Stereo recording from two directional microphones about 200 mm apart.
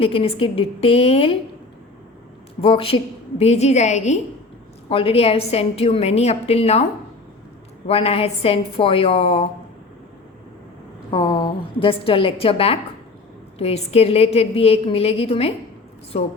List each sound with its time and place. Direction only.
0.0 s a woman's voice: 25° left (ahead or behind)
2.6 s a woman's voice: 25° left (ahead or behind)
7.9 s a woman's voice: 30° left (ahead or behind)
11.1 s a woman's voice: 25° left (ahead or behind)